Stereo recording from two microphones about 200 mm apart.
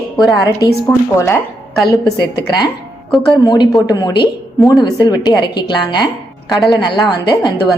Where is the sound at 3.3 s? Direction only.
20° left (ahead or behind).